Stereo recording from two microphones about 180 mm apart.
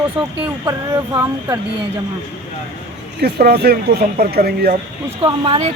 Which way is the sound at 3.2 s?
65° right (ahead or behind).